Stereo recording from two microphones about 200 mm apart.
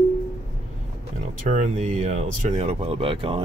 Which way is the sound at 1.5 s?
35° right (ahead or behind).